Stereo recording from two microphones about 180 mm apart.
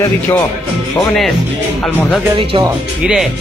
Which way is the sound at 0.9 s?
Centre (ahead or behind).